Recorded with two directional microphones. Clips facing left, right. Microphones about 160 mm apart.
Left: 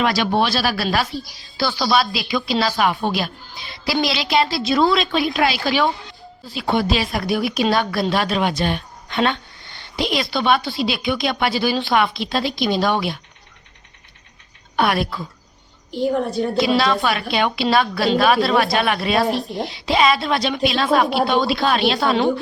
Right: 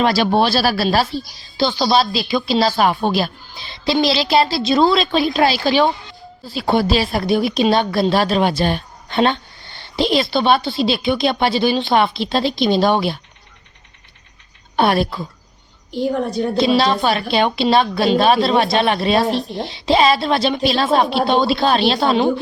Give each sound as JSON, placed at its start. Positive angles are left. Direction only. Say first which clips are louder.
{"t": 0.0, "sound": "speech", "louder": "right 3 dB", "side_deg": -30}
{"t": 14.8, "sound": "speech", "louder": "right 3 dB", "side_deg": -30}
{"t": 16.0, "sound": "a woman's voice", "louder": "even", "side_deg": 0}
{"t": 16.6, "sound": "speech", "louder": "right 3 dB", "side_deg": -25}